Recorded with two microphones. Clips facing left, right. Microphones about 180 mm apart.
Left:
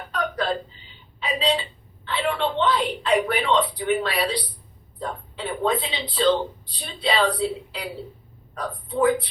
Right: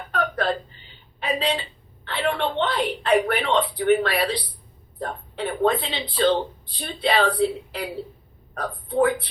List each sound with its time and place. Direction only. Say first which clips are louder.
0.1 s whimper: right 2 dB; 60° right (ahead or behind)
1.2 s a woman's voice: left 1 dB; 55° right (ahead or behind)